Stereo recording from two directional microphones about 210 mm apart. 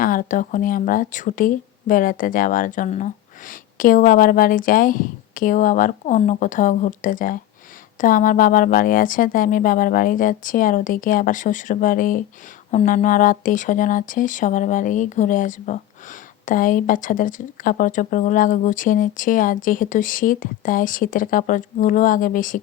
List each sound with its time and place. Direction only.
0.0 s speech: 40° left (ahead or behind)